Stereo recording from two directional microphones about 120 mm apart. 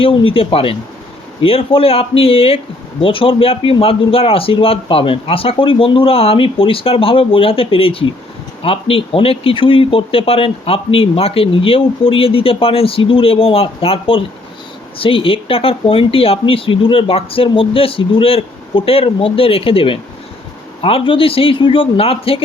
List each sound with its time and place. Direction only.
0.0 s speech: 50° left (ahead or behind)